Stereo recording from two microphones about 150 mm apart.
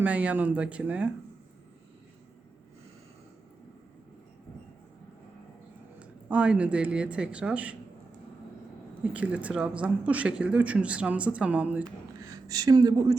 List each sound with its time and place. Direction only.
0.0 s speech: 10° right (ahead or behind)
6.0 s speech: 10° right (ahead or behind)
9.1 s speech: 10° right (ahead or behind)
12.5 s a woman's voice: 25° right (ahead or behind)